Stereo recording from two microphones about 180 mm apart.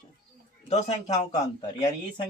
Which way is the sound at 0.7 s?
40° left (ahead or behind).